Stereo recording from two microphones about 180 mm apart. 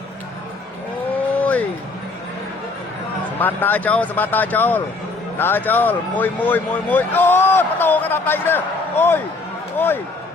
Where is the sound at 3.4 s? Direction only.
10° left (ahead or behind).